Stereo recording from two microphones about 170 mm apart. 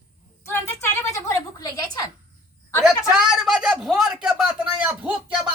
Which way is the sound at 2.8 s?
Centre (ahead or behind).